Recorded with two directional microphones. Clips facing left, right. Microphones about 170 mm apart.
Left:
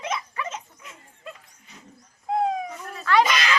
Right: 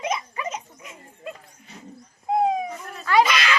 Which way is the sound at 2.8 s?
Centre (ahead or behind).